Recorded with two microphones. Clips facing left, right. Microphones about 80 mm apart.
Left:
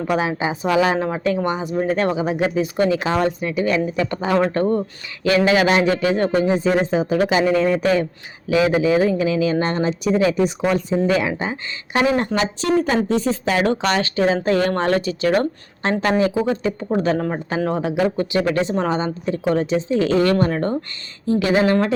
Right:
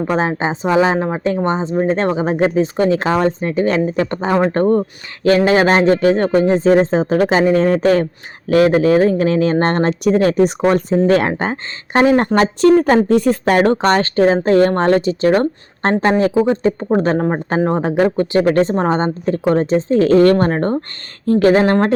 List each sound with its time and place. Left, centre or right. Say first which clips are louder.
0.1 s speech: right 1 dB; right